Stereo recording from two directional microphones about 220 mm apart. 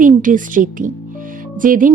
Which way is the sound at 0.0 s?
35° right (ahead or behind).